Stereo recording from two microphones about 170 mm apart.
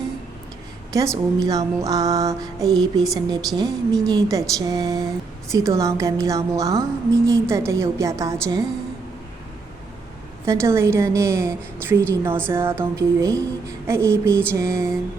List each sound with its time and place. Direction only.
0.9 s a woman's voice: 20° right (ahead or behind)
10.4 s a woman's voice: 15° right (ahead or behind)